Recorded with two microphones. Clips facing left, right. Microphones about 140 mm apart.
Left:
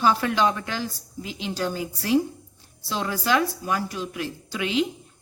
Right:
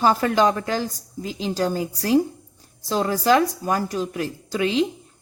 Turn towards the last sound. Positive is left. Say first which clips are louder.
# right 4 dB
turn(degrees=-35)  # may be behind; listen again after turning